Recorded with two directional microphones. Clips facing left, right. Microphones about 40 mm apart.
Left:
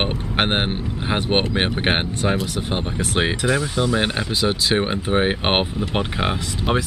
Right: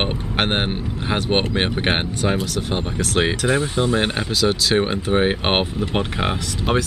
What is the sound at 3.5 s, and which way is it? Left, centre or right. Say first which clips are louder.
Speech: right 1 dB; right.